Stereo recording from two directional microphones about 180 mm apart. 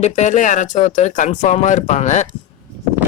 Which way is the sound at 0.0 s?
40° left (ahead or behind).